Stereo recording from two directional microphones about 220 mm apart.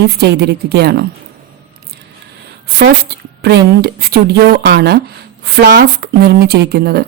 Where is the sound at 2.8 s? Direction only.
45° right (ahead or behind).